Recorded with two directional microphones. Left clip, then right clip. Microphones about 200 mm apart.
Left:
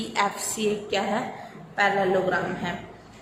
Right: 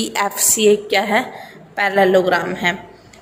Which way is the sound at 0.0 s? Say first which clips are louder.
Right 6 dB; 40° right (ahead or behind).